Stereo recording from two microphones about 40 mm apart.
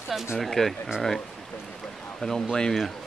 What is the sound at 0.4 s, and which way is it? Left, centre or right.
Speech, centre.